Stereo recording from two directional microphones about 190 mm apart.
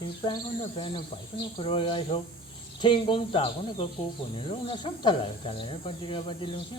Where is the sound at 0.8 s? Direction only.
25° left (ahead or behind).